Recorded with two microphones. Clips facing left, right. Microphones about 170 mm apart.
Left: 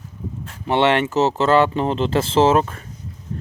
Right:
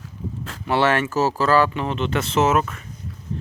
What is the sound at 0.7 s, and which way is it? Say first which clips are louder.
Speech: left 2 dB; 20° left (ahead or behind).